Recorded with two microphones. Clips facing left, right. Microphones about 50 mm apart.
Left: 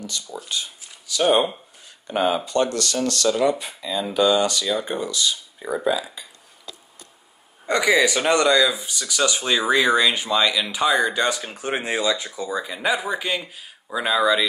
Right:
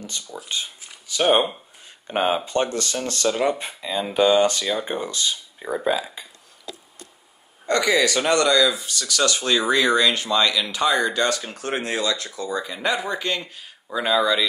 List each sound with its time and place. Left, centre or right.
0.5 s a sound: right
2.0 s speech: right
7.6 s speech: centre